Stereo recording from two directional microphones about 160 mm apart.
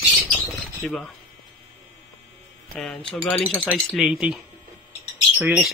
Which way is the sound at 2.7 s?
5° left (ahead or behind).